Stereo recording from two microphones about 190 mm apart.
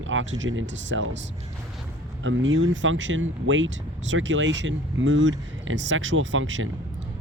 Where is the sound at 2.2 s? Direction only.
80° right.